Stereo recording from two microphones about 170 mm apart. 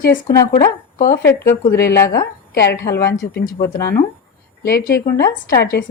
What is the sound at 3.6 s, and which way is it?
Speech, 15° left (ahead or behind).